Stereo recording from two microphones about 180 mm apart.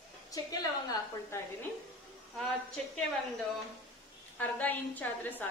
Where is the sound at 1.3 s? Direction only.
15° left (ahead or behind).